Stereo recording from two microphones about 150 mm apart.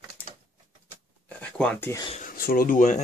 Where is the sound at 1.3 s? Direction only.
10° left (ahead or behind).